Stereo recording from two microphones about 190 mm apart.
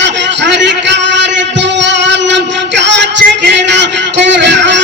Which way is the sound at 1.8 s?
70° right (ahead or behind).